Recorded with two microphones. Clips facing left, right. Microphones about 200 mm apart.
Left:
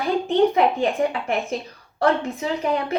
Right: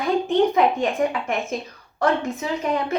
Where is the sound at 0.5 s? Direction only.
30° left (ahead or behind).